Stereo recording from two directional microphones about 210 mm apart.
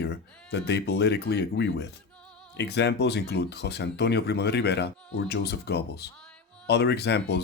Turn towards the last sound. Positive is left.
turn(degrees=55)  # may be behind; listen again after turning